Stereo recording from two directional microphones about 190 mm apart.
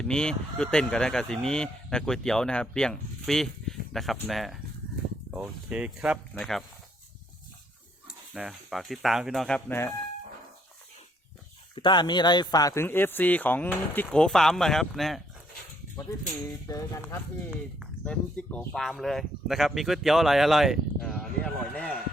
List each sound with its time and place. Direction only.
0.0 s speech: 5° left (ahead or behind)
8.3 s speech: centre (ahead or behind)
11.7 s speech: 25° left (ahead or behind); by 15.2 s centre (ahead or behind)
16.3 s speech: 20° left (ahead or behind)
17.7 s speech: 5° left (ahead or behind)